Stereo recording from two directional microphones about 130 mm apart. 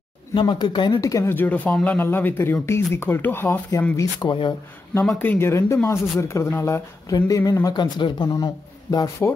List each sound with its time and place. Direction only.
0.3 s speech: 35° left (ahead or behind)
5.0 s speech: 15° left (ahead or behind)